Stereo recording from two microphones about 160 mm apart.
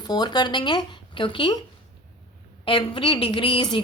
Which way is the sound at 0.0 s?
25° left (ahead or behind).